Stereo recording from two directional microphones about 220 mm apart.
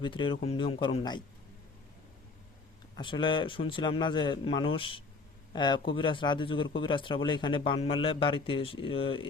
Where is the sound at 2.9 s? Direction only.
20° left (ahead or behind).